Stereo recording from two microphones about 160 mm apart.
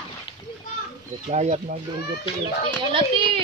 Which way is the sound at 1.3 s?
45° right (ahead or behind).